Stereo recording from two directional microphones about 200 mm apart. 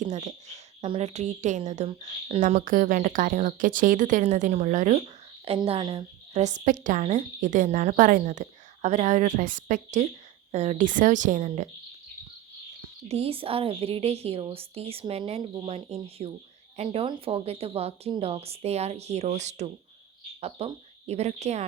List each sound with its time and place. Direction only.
0.0 s a woman's voice: 35° right (ahead or behind)
13.1 s a woman's voice: 30° right (ahead or behind)